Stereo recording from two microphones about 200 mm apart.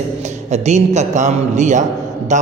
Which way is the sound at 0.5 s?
35° right (ahead or behind).